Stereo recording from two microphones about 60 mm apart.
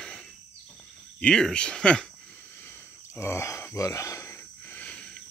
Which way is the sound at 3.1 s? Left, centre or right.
Left.